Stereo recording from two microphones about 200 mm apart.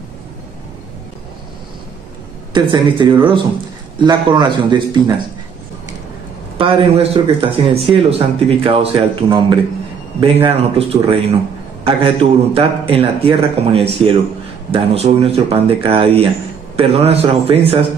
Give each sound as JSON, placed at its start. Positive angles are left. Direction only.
{"t": 2.5, "sound": "a man's voice", "side_deg": -25}
{"t": 6.6, "sound": "a man's voice", "side_deg": -30}